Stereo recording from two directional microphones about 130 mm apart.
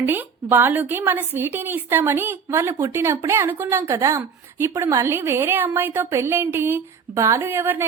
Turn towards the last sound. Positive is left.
turn(degrees=-15)  # may be behind; listen again after turning